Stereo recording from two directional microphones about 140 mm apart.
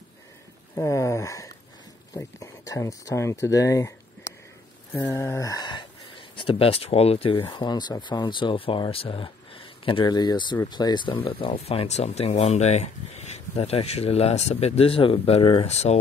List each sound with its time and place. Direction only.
0.7 s speech: 20° left (ahead or behind); by 16.0 s 50° left (ahead or behind)